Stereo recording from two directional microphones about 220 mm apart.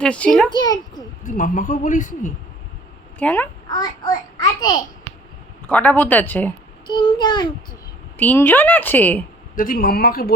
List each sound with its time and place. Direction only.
0.0 s a child's voice: 5° left (ahead or behind)
0.5 s a child's voice: 20° left (ahead or behind)
1.2 s a man's voice: 35° left (ahead or behind)
3.2 s a woman's voice: 5° left (ahead or behind)
3.7 s a child's voice: 15° left (ahead or behind)
5.6 s a woman's voice: 5° left (ahead or behind)
6.8 s a child's voice: 20° left (ahead or behind)
8.2 s a woman's voice: 10° left (ahead or behind)
9.6 s speech: 40° left (ahead or behind)